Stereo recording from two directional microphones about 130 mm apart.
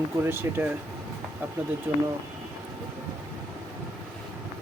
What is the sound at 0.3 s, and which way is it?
Speech, 15° right (ahead or behind).